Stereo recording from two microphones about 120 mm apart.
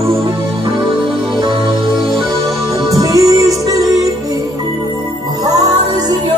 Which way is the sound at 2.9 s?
30° right (ahead or behind).